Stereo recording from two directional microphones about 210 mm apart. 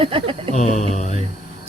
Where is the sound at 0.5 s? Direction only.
35° left (ahead or behind).